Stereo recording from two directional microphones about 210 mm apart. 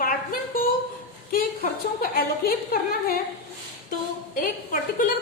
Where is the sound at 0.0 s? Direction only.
45° left (ahead or behind).